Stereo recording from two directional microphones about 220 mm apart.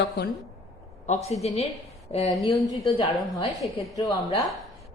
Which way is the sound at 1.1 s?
30° left (ahead or behind).